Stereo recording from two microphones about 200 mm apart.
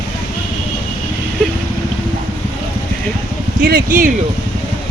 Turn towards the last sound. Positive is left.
turn(degrees=-45)  # may be behind; listen again after turning